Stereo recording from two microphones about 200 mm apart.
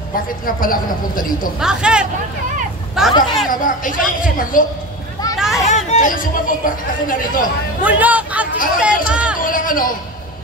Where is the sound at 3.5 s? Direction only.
40° left (ahead or behind).